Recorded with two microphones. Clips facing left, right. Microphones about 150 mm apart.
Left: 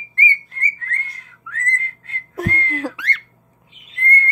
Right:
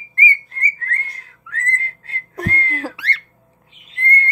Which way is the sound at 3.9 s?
30° right (ahead or behind).